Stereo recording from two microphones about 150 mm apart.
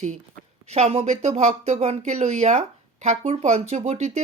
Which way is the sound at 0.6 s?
45° right (ahead or behind).